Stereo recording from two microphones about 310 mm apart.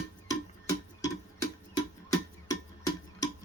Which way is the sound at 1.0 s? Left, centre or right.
Centre.